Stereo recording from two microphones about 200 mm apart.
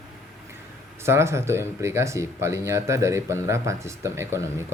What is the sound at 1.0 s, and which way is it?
Speech, 15° right (ahead or behind).